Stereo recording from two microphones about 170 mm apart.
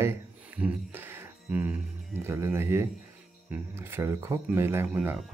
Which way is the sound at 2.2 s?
15° right (ahead or behind).